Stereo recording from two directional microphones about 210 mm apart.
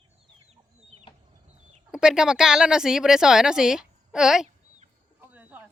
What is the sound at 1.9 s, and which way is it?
Speech, 5° right (ahead or behind).